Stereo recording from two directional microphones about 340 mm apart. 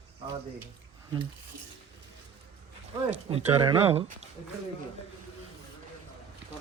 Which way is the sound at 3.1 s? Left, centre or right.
Centre.